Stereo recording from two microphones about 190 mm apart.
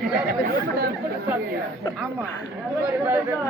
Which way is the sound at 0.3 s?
55° right (ahead or behind).